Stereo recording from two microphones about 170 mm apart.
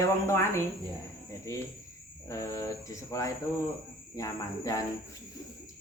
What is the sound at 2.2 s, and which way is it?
Speech, 20° left (ahead or behind).